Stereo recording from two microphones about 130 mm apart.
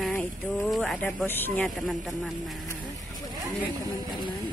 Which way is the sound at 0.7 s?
Centre (ahead or behind).